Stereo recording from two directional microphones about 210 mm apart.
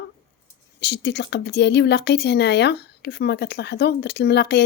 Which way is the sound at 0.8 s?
55° left (ahead or behind).